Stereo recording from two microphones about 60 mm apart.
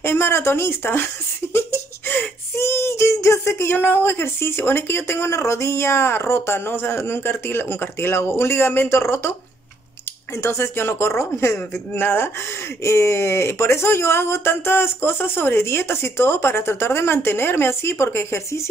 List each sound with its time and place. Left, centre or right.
0.0 s a sound: left
3.7 s speech: left
12.8 s speech: left